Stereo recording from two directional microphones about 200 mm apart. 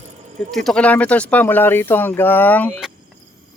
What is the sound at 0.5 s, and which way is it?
Speech, 5° left (ahead or behind).